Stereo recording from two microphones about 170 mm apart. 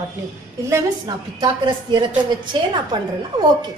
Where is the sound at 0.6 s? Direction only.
20° right (ahead or behind).